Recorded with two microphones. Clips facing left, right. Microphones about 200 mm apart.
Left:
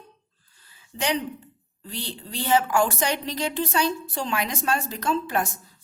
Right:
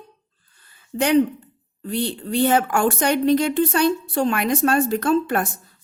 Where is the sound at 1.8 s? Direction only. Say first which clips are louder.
Right 11 dB; 55° right (ahead or behind).